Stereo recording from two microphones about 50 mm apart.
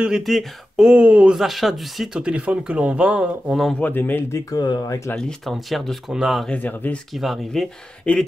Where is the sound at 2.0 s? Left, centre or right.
Centre.